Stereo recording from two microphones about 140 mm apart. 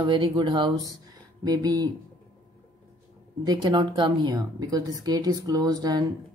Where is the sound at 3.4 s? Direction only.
30° right (ahead or behind).